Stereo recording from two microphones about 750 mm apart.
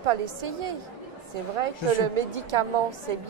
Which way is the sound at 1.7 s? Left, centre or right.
Left.